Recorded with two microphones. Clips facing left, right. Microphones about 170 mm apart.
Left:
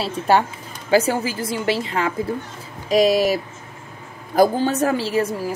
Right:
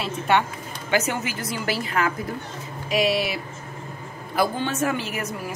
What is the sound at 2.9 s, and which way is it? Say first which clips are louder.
Speech: left 7 dB; 40° left (ahead or behind).